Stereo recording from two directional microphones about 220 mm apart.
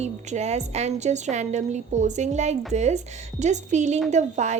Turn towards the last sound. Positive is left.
turn(degrees=-30)  # may be behind; listen again after turning